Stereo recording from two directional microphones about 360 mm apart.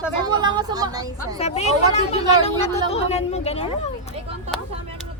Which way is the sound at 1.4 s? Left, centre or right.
Centre.